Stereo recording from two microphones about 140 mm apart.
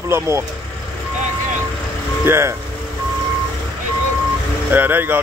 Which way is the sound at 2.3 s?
20° right (ahead or behind).